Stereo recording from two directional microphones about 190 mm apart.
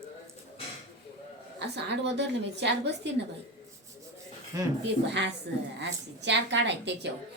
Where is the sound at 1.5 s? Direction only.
65° right (ahead or behind).